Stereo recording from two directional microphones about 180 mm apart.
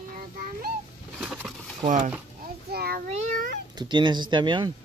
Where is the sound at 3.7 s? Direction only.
25° right (ahead or behind).